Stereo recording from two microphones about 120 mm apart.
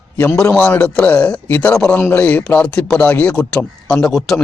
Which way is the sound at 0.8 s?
10° left (ahead or behind).